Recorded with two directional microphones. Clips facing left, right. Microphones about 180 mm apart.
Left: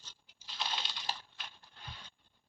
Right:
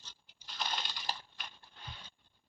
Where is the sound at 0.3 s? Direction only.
Centre (ahead or behind).